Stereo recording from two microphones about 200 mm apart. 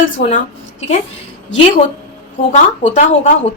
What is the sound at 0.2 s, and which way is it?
Speech, 60° left (ahead or behind).